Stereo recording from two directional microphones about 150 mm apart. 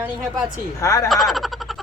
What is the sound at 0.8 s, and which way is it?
Speech, 20° left (ahead or behind).